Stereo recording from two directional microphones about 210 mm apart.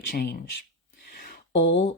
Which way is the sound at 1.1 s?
45° left (ahead or behind).